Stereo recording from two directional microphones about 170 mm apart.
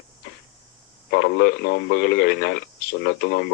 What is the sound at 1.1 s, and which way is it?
Speech, 65° left (ahead or behind).